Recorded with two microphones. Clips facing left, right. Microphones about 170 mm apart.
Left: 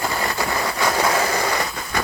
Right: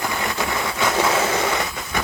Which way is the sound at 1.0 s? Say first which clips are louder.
Right 2 dB; 25° right (ahead or behind).